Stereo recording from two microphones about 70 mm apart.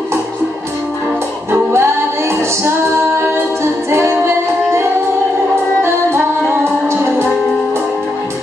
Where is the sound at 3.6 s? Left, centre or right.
Right.